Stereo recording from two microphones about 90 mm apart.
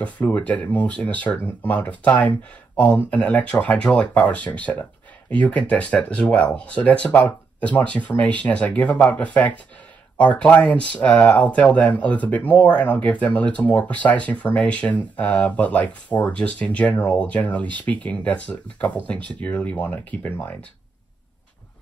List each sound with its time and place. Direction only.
0.0 s speech: 15° left (ahead or behind)